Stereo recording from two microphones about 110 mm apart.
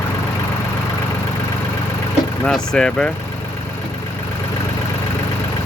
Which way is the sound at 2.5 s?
5° left (ahead or behind).